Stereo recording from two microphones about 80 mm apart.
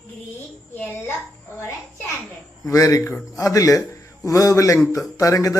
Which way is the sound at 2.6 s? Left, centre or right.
Left.